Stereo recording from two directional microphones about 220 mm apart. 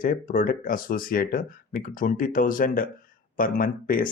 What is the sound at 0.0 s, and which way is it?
Speech, 40° left (ahead or behind).